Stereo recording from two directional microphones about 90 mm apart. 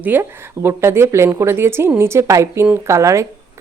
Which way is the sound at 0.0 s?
25° right (ahead or behind).